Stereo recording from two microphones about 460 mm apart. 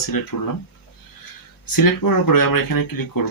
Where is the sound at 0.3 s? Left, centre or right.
Left.